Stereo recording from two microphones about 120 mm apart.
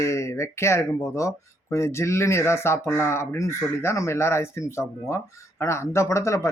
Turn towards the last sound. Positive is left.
turn(degrees=25)  # may be behind; listen again after turning